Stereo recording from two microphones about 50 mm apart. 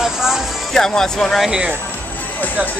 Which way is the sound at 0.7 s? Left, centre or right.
Centre.